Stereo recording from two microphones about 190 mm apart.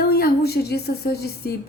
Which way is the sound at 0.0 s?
50° left (ahead or behind).